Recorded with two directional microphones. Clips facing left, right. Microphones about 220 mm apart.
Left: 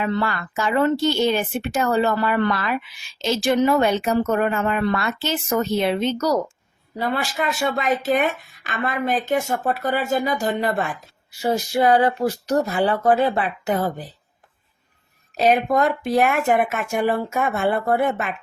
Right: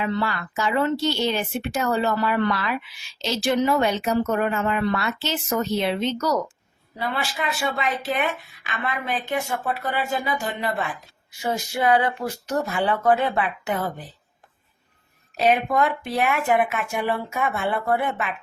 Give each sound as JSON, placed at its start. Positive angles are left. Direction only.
{"t": 0.0, "sound": "speech", "side_deg": 50}
{"t": 15.4, "sound": "speech", "side_deg": 40}